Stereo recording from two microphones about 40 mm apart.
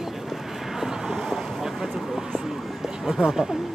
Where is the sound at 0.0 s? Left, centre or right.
Centre.